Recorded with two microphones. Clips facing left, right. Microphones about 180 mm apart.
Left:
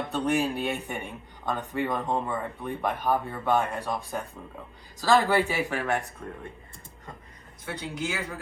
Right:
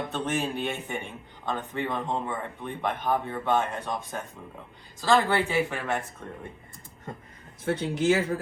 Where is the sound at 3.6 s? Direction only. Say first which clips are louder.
Left 1 dB; 35° left (ahead or behind).